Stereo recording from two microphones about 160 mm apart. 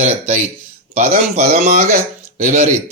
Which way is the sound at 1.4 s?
75° right (ahead or behind).